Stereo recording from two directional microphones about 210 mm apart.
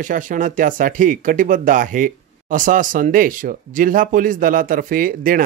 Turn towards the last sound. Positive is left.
turn(degrees=-40)  # may be behind; listen again after turning